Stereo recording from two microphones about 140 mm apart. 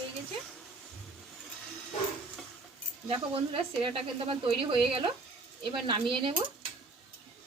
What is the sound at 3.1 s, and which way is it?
Speech, 40° right (ahead or behind).